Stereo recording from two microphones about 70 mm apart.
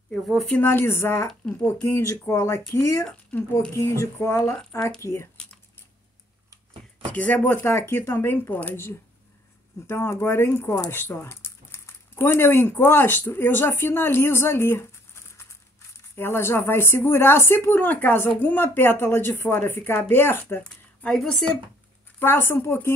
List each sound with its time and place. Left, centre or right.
0.1 s speech: centre
0.6 s a woman's voice: left
2.7 s a sound: left
3.0 s speech: left
3.7 s a sound: left
7.1 s speech: left
7.6 s a woman's voice: left
20.6 s speech: centre
22.2 s a woman's voice: left